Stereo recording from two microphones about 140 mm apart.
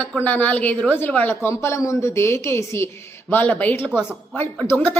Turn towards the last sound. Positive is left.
turn(degrees=15)  # may be behind; listen again after turning